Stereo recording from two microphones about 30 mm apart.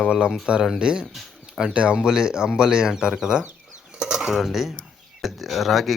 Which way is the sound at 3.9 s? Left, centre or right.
Right.